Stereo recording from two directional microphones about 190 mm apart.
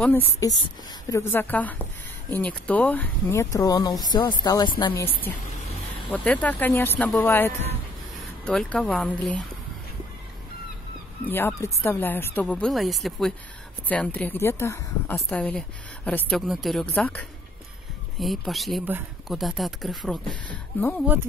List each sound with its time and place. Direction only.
0.0 s speech: 10° left (ahead or behind)
6.0 s speech: 5° left (ahead or behind)
11.2 s speech: 10° left (ahead or behind)